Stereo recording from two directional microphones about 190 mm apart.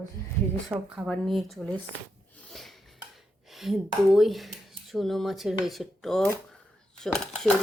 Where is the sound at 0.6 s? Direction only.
5° right (ahead or behind).